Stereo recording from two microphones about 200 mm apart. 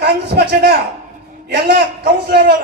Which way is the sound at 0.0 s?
55° right (ahead or behind).